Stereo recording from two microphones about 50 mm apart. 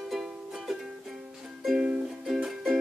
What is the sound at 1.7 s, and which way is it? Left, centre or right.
Music, right.